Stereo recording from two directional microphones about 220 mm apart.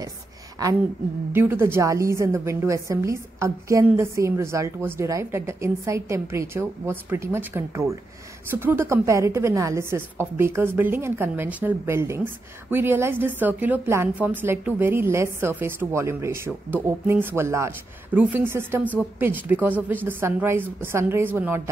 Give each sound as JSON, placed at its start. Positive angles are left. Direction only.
{"t": 0.6, "sound": "a woman's voice", "side_deg": -15}